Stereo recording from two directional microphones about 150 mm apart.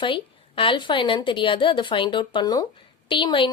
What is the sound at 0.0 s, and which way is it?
A woman's voice, 35° left (ahead or behind).